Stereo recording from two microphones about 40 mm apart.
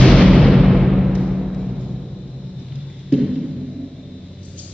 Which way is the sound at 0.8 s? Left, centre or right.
Centre.